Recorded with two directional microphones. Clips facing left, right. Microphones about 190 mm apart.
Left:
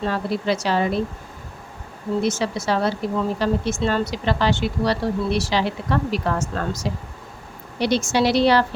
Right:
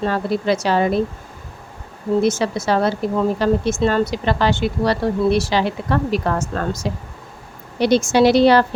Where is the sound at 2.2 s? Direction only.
50° right (ahead or behind).